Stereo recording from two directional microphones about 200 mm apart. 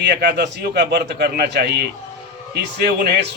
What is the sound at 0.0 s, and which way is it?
A man's voice, 55° right (ahead or behind).